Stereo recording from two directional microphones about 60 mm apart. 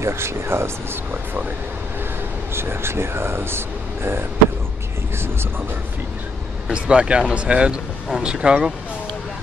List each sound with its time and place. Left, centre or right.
0.0 s speech: right
2.5 s speech: right
6.7 s speech: centre